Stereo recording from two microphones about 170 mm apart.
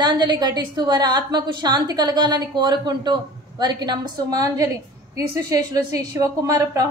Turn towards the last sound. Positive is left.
turn(degrees=-20)  # may be behind; listen again after turning